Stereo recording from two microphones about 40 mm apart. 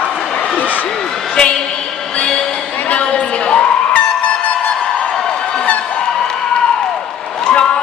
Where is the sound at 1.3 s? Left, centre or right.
Left.